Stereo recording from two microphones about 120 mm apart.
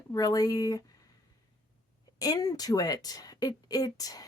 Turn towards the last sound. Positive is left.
turn(degrees=30)  # may be behind; listen again after turning